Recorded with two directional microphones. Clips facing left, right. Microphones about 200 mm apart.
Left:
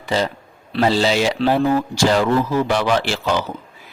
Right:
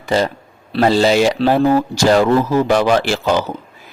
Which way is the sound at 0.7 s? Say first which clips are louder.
Right 4 dB; 45° right (ahead or behind).